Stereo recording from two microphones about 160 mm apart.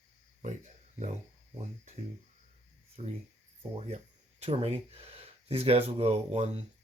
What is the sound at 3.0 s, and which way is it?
Speech, 40° right (ahead or behind).